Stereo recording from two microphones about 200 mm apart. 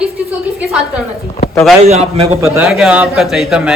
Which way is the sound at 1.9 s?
30° right (ahead or behind).